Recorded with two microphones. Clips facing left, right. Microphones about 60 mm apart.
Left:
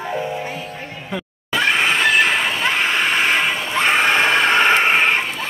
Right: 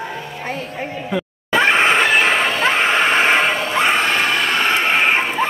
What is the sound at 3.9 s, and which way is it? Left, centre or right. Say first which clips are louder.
Vehicle: left 2 dB; centre.